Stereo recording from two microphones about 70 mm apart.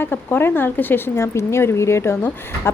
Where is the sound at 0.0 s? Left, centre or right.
Left.